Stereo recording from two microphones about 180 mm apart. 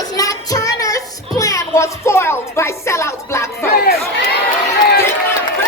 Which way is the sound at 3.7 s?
55° left (ahead or behind).